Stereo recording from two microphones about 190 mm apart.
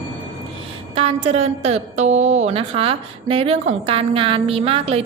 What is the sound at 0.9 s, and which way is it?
A woman's voice, 30° right (ahead or behind).